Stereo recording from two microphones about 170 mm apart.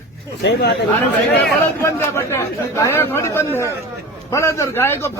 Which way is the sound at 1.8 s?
15° left (ahead or behind).